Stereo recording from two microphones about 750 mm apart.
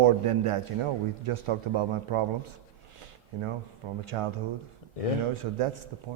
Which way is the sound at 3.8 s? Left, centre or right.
Right.